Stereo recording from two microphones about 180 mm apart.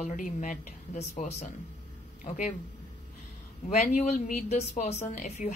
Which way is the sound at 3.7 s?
45° left (ahead or behind).